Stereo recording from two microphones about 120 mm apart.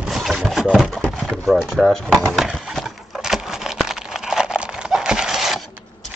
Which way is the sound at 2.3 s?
Centre (ahead or behind).